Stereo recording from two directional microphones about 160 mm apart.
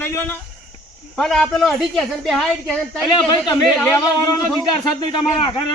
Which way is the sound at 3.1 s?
30° left (ahead or behind).